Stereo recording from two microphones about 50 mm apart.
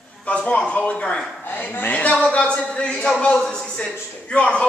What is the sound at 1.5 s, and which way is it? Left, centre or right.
A man's voice, left.